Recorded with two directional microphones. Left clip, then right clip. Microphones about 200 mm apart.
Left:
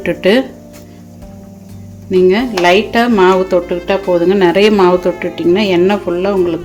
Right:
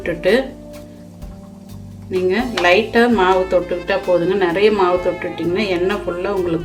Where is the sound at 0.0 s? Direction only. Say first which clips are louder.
Left 4 dB; 40° left (ahead or behind).